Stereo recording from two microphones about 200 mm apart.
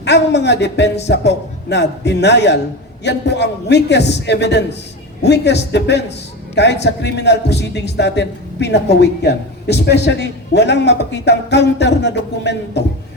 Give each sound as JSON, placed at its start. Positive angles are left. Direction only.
{"t": 0.0, "sound": "a man's voice", "side_deg": 60}